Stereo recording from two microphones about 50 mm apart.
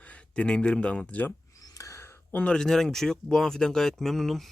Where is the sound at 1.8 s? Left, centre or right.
Left.